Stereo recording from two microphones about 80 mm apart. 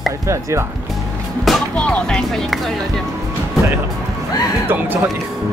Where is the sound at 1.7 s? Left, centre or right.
Centre.